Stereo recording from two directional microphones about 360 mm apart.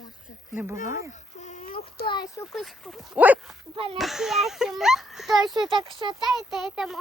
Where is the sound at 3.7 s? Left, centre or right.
Centre.